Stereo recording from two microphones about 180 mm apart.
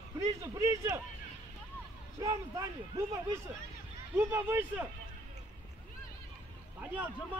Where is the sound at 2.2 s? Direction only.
15° right (ahead or behind).